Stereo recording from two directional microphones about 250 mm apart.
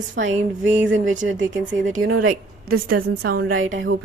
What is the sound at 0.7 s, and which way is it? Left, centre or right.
Speech, right.